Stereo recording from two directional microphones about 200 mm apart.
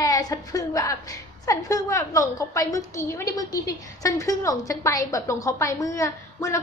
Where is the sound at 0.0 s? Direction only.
15° left (ahead or behind).